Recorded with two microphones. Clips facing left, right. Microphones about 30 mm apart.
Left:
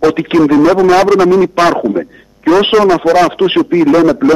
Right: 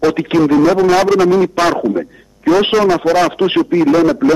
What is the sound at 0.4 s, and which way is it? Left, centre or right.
Speech, left.